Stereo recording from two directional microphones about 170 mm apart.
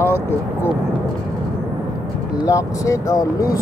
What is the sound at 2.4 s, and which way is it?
Speech, 20° left (ahead or behind).